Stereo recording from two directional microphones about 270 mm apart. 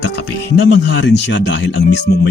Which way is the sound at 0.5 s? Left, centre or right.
Left.